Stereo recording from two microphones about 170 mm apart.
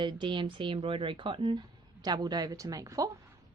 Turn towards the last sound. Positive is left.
turn(degrees=-20)  # may be behind; listen again after turning